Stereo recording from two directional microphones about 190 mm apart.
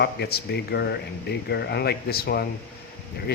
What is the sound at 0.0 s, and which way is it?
Speech, 60° left (ahead or behind).